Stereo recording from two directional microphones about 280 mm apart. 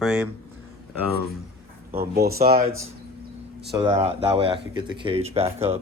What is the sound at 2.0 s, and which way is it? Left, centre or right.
Speech, right.